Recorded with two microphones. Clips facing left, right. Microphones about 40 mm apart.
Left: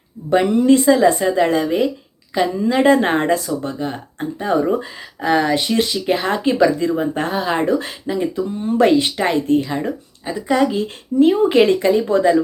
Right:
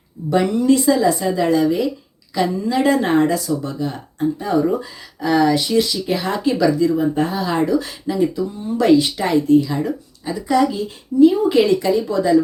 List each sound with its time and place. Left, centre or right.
0.3 s speech: left
7.4 s speech: left
8.0 s speech: left
8.4 s speech: left
10.8 s speech: left